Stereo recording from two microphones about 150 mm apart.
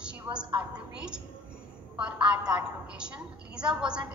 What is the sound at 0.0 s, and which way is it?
A woman's voice, 5° right (ahead or behind).